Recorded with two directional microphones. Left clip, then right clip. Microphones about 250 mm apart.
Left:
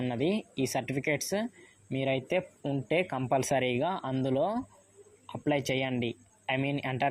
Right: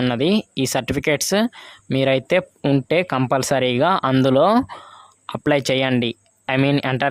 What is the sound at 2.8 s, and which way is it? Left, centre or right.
Speech, right.